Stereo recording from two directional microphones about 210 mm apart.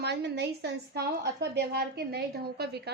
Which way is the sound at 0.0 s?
50° right (ahead or behind).